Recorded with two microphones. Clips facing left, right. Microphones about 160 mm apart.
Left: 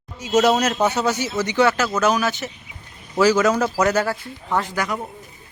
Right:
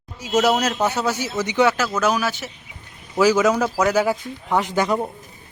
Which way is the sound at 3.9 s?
10° right (ahead or behind).